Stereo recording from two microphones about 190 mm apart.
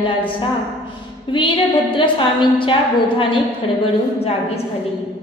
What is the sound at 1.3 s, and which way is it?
A woman's voice, 25° left (ahead or behind).